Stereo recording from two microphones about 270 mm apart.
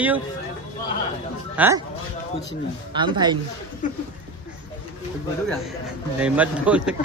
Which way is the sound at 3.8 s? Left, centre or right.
Left.